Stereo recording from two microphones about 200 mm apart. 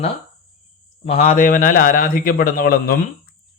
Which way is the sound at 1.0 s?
40° left (ahead or behind).